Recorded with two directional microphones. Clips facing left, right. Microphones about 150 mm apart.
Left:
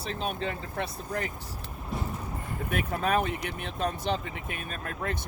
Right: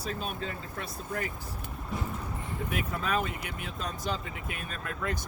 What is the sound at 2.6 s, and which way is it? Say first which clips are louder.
Speech: left 4 dB; 55° left (ahead or behind).